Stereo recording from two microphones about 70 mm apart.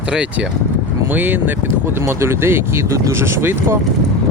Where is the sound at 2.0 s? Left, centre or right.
Right.